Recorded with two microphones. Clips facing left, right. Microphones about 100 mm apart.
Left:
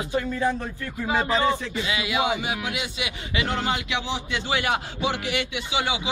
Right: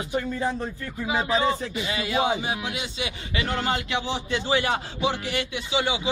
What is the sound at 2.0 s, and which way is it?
Speech, 35° right (ahead or behind).